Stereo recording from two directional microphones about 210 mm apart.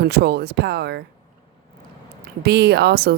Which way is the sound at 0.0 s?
50° right (ahead or behind).